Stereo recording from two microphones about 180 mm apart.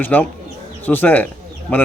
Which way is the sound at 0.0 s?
10° left (ahead or behind).